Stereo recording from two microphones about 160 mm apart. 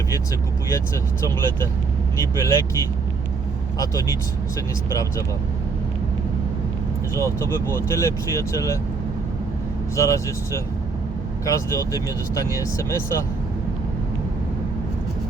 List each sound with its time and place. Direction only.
1.2 s speech: 15° left (ahead or behind)
7.2 s speech: 20° left (ahead or behind)
9.9 s speech: 20° left (ahead or behind)